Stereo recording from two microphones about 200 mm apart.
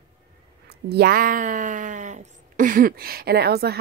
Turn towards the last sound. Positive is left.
turn(degrees=-50)  # may be behind; listen again after turning